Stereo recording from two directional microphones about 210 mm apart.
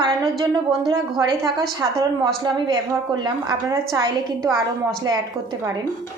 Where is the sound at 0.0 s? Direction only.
20° right (ahead or behind).